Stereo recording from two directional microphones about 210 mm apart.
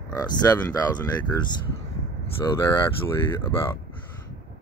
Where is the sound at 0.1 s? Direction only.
15° left (ahead or behind).